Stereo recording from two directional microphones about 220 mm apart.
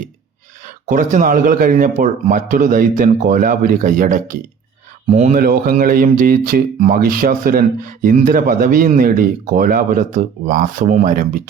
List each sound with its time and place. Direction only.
0.6 s speech: 35° right (ahead or behind)